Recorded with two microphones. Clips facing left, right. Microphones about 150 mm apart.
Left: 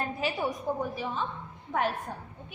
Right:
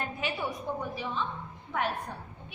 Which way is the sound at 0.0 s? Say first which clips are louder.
Left 3 dB; 35° left (ahead or behind).